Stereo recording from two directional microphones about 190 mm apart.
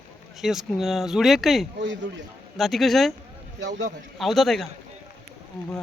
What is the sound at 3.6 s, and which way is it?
Speech, 70° right (ahead or behind).